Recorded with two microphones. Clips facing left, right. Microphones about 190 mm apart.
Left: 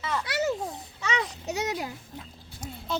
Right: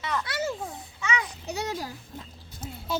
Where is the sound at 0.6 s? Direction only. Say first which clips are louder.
Left 1 dB; 35° left (ahead or behind).